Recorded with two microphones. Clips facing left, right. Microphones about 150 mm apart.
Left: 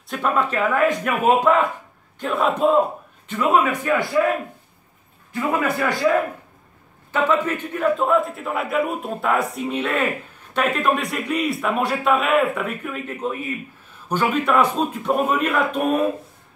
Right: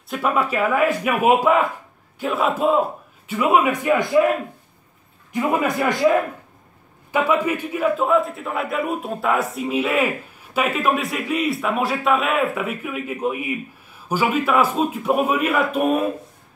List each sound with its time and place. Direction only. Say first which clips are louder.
0.1 s a man's voice: even; 5° right (ahead or behind)
5.3 s a man's voice: right 1 dB; 15° right (ahead or behind)